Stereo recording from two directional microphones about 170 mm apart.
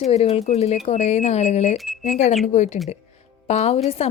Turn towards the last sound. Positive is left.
turn(degrees=40)  # may be behind; listen again after turning